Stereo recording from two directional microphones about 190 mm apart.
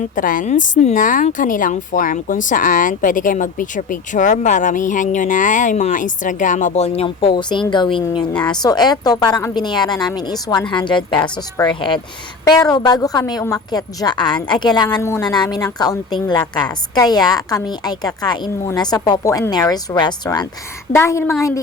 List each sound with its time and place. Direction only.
0.0 s a woman's voice: 45° left (ahead or behind); by 21.3 s 15° left (ahead or behind)